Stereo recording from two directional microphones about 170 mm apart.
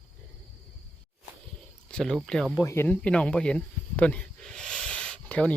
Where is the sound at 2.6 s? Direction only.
15° left (ahead or behind).